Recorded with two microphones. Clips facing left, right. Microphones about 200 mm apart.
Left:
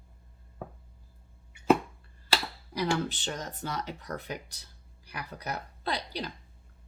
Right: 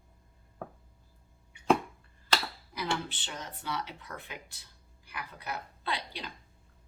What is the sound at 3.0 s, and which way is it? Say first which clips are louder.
Speech: left 7 dB; 45° left (ahead or behind).